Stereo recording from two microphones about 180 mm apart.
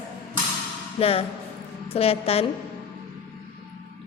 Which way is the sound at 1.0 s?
35° left (ahead or behind).